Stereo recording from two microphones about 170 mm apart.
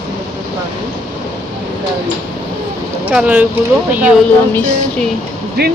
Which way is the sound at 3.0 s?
10° right (ahead or behind).